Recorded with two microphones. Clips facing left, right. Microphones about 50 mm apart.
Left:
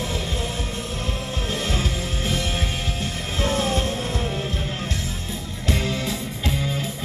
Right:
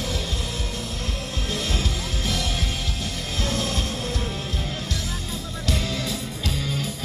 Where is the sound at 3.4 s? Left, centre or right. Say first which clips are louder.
Left 5 dB; left.